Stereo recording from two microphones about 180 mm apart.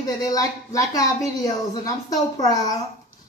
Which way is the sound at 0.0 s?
20° left (ahead or behind).